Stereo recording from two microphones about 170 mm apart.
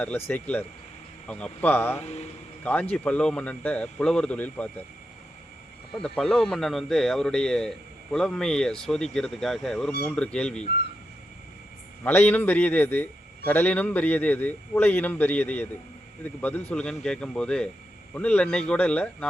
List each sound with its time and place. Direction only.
0.0 s a man's voice: 10° left (ahead or behind)
2.0 s speech: 40° left (ahead or behind)
2.9 s a man's voice: 5° left (ahead or behind)
5.9 s a man's voice: 5° left (ahead or behind)
12.0 s a man's voice: 10° left (ahead or behind)